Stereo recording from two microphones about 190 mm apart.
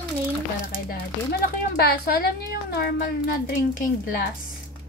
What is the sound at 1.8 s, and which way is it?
Speech, 55° left (ahead or behind).